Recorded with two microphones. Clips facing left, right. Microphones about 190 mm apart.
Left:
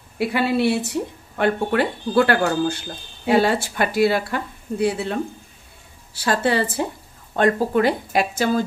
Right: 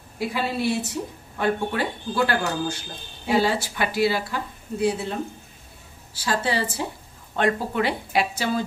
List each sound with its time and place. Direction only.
0.2 s speech: 65° left (ahead or behind)
6.1 s speech: 60° left (ahead or behind)
7.3 s speech: 45° left (ahead or behind)